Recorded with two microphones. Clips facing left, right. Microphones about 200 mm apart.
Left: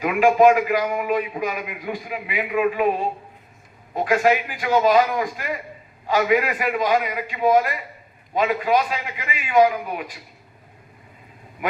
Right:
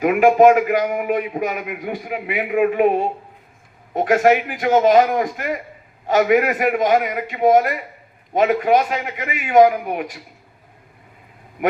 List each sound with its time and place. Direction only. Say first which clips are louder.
0.0 s a man's voice: right 3 dB; 55° right (ahead or behind)